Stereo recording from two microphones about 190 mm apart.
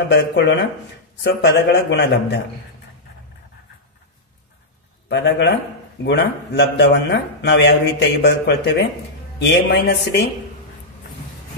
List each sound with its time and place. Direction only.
0.1 s speech: 70° left (ahead or behind)
5.1 s speech: 65° left (ahead or behind)